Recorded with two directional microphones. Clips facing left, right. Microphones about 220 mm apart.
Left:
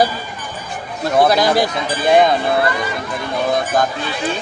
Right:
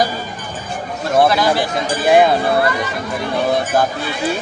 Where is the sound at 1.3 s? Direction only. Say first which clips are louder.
Left 2 dB; 40° left (ahead or behind).